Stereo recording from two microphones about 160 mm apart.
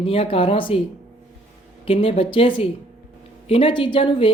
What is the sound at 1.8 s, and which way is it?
Speech, 35° left (ahead or behind).